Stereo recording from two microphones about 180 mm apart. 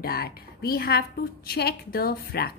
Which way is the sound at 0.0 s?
60° left (ahead or behind).